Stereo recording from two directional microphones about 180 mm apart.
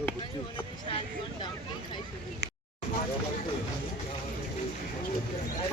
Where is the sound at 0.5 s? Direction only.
30° left (ahead or behind).